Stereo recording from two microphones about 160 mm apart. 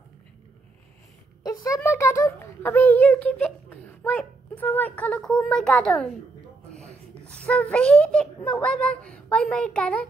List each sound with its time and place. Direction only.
1.4 s a child's voice: 20° left (ahead or behind); by 6.1 s 5° left (ahead or behind)
7.4 s a child's voice: 5° left (ahead or behind)